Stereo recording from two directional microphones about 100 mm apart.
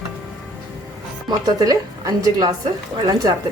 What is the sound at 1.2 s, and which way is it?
Speech, 40° right (ahead or behind).